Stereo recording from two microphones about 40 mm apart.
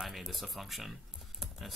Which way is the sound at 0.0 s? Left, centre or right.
Centre.